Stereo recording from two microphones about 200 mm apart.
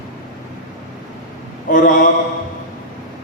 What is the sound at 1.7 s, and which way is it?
Speech, 40° left (ahead or behind).